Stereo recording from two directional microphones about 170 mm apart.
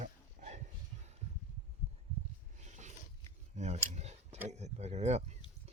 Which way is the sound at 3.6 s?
40° right (ahead or behind).